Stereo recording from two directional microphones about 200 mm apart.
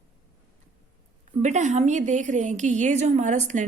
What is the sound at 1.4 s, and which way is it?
A woman's voice, 35° right (ahead or behind).